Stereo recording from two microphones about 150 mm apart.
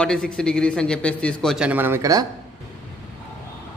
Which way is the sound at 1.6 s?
10° right (ahead or behind).